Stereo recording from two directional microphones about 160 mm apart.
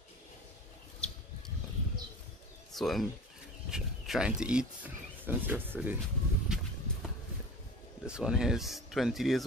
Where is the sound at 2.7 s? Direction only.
Centre (ahead or behind).